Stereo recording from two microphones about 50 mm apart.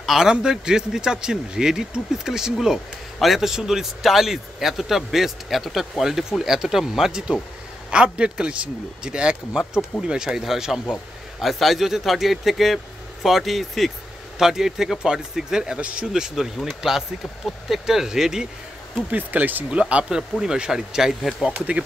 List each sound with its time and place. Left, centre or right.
0.0 s a man's voice: centre
16.1 s speech: centre
19.0 s speech: right
19.7 s a man's voice: right